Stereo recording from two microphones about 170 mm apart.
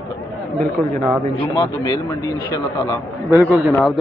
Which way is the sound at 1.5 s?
25° left (ahead or behind).